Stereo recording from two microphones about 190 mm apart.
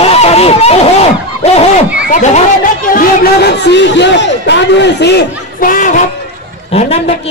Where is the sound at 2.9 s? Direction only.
55° left (ahead or behind).